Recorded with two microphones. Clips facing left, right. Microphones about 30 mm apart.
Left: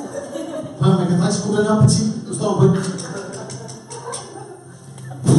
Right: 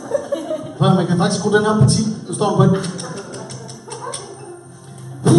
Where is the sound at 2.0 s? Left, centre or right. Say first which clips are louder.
Even; centre.